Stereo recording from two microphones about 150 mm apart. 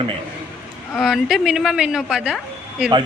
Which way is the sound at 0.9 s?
Centre (ahead or behind).